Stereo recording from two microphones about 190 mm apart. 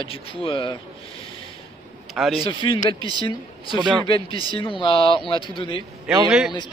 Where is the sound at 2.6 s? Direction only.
25° left (ahead or behind).